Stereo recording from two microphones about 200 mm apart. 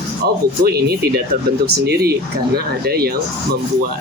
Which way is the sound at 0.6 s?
50° right (ahead or behind).